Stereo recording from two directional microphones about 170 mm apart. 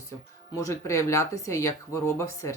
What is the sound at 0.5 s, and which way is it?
Speech, 20° left (ahead or behind).